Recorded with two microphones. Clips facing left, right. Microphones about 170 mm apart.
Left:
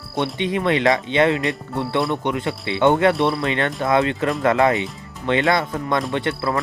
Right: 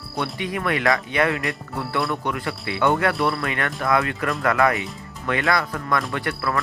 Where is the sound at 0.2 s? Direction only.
25° left (ahead or behind).